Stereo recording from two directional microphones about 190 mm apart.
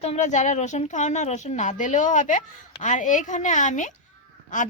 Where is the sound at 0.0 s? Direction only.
35° left (ahead or behind).